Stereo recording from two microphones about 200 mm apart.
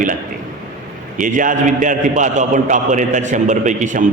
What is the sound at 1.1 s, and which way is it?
A man's voice, 40° right (ahead or behind).